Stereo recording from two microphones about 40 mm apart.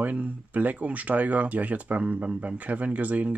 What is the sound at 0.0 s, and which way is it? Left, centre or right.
Speech, right.